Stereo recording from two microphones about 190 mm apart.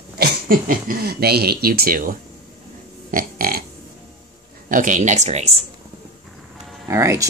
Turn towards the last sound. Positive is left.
turn(degrees=-15)  # may be behind; listen again after turning